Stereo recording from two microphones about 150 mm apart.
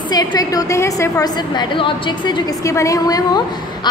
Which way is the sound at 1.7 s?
35° left (ahead or behind).